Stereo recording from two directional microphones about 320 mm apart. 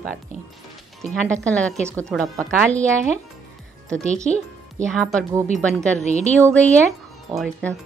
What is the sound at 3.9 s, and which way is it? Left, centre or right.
Speech, centre.